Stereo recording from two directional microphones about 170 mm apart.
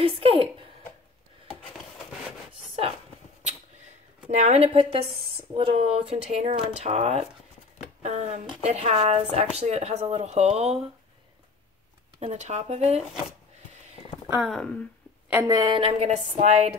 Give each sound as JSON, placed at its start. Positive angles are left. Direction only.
{"t": 0.0, "sound": "speech", "side_deg": -35}
{"t": 4.3, "sound": "speech", "side_deg": -40}
{"t": 12.2, "sound": "speech", "side_deg": -40}
{"t": 14.3, "sound": "speech", "side_deg": 0}
{"t": 15.4, "sound": "speech", "side_deg": -25}